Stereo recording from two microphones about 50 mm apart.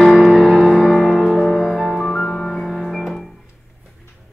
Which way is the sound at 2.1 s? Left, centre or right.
Centre.